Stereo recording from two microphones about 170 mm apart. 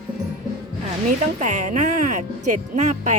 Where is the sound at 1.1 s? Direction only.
45° right (ahead or behind).